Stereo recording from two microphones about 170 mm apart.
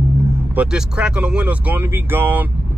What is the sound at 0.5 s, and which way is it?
Speech, 5° right (ahead or behind).